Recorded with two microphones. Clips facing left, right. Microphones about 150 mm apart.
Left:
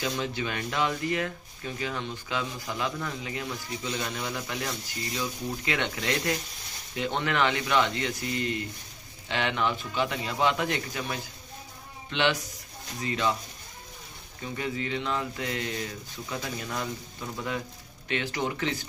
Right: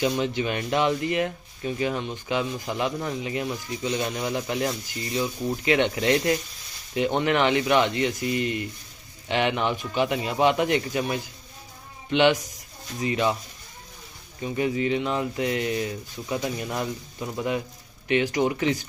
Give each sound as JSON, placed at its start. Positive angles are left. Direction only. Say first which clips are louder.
{"t": 0.0, "sound": "speech", "louder": "right 6 dB", "side_deg": -20}
{"t": 14.6, "sound": "speech", "louder": "right 8 dB", "side_deg": -15}